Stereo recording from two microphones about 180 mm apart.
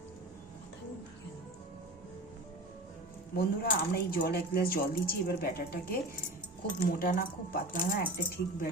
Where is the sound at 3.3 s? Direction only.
55° left (ahead or behind).